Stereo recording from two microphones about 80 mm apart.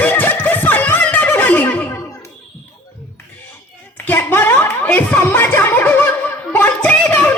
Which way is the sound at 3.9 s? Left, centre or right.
Left.